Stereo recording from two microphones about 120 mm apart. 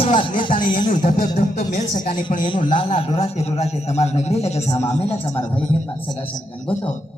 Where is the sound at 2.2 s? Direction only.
45° left (ahead or behind); by 4.7 s 60° left (ahead or behind).